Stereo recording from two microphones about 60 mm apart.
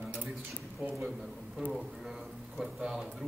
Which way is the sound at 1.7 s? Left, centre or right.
Centre.